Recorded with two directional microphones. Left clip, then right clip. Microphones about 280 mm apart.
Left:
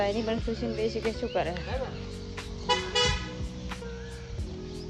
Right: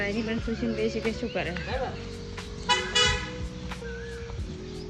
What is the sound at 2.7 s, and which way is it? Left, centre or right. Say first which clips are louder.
Vehicle: right 3 dB; left.